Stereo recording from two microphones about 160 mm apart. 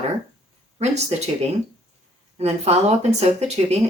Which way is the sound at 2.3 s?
40° right (ahead or behind).